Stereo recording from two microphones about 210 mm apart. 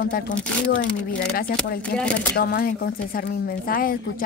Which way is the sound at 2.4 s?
45° left (ahead or behind).